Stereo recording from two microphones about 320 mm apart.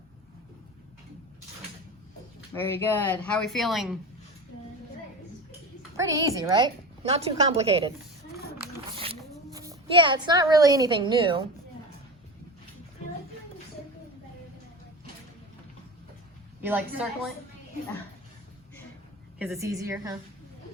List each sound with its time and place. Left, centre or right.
2.6 s speech: centre
6.0 s a woman's voice: centre
9.5 s a woman's voice: centre
16.6 s speech: centre
19.4 s a woman's voice: centre